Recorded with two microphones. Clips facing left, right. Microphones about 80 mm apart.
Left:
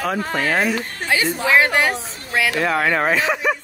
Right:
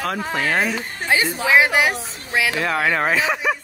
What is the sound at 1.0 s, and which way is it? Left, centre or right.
A woman's voice, centre.